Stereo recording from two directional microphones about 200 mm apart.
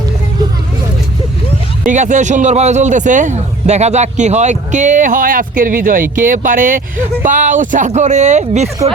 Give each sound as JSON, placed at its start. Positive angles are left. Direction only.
{"t": 1.9, "sound": "speech", "side_deg": -40}